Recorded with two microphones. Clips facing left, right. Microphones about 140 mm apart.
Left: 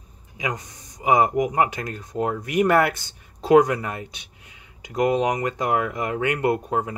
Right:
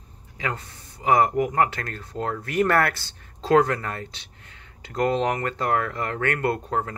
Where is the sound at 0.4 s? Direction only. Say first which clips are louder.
Left 1 dB; 15° left (ahead or behind).